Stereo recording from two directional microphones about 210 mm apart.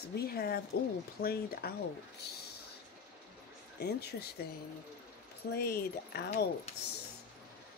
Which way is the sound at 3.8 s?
50° left (ahead or behind).